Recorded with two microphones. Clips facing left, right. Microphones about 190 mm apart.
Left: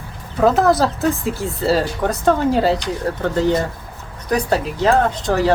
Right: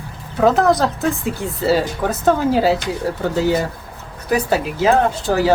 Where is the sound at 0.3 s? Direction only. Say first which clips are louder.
Even; centre (ahead or behind).